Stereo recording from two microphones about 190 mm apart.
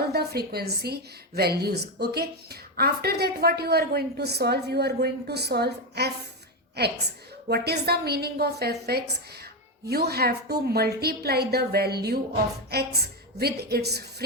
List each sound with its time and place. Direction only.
0.1 s a woman's voice: 55° right (ahead or behind)
9.8 s a woman's voice: 55° right (ahead or behind)